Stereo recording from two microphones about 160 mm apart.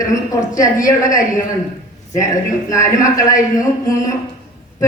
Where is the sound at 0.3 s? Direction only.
20° left (ahead or behind).